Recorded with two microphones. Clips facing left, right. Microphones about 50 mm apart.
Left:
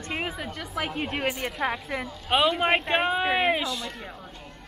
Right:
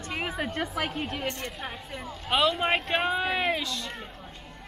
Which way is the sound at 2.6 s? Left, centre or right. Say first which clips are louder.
Left 3 dB; centre.